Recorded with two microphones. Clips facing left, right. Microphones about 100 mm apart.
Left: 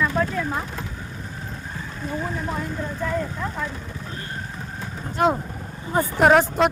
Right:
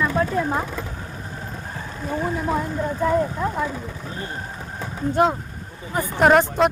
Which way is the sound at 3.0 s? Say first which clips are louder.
Right 6 dB; 20° right (ahead or behind).